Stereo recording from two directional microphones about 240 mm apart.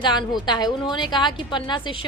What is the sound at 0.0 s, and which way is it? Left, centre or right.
A woman's voice, centre.